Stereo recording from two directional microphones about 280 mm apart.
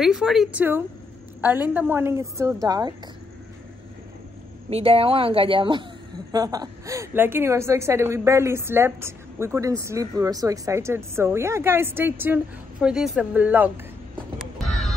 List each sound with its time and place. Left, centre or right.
0.0 s a woman's voice: centre
4.6 s a woman's voice: right
14.7 s a sound: centre